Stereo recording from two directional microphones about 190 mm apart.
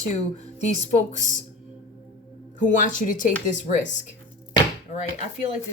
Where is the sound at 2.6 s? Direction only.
45° left (ahead or behind).